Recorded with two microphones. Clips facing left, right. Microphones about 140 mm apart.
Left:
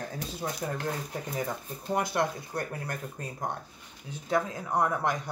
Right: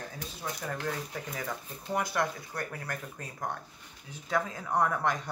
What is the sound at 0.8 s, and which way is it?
Speech, 25° left (ahead or behind).